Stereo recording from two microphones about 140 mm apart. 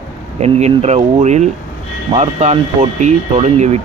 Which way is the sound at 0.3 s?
50° right (ahead or behind).